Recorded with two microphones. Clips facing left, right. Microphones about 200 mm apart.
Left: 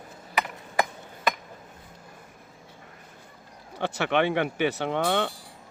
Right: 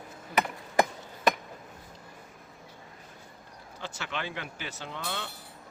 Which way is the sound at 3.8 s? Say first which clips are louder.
Left 13 dB; 65° left (ahead or behind).